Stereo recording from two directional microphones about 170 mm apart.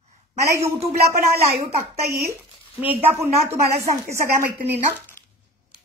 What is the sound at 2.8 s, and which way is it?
Speech, 10° right (ahead or behind).